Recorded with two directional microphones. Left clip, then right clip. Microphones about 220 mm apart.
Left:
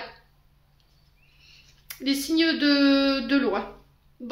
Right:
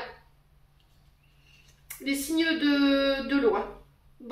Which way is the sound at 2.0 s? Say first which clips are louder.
Left 4 dB; 40° left (ahead or behind).